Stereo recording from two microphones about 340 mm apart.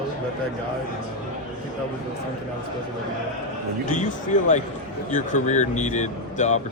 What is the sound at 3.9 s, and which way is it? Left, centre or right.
A man's voice, left.